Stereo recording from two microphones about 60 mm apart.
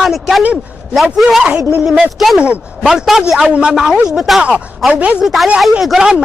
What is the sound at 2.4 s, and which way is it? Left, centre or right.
Speech, centre.